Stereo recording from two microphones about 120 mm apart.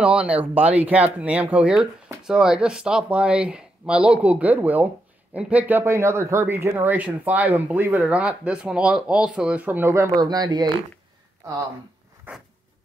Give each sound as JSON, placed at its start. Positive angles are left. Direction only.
{"t": 0.0, "sound": "speech", "side_deg": -10}
{"t": 10.2, "sound": "speech", "side_deg": -35}
{"t": 12.3, "sound": "a sound", "side_deg": -15}